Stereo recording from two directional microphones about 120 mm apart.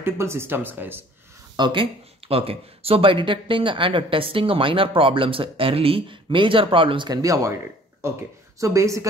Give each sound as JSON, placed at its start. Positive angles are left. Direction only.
{"t": 0.0, "sound": "speech", "side_deg": -20}
{"t": 1.6, "sound": "speech", "side_deg": -45}
{"t": 8.5, "sound": "speech", "side_deg": -25}